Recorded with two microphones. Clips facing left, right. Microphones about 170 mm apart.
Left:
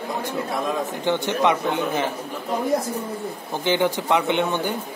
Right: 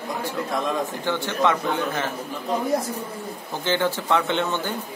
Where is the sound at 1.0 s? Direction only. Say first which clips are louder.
Left 3 dB; 20° left (ahead or behind).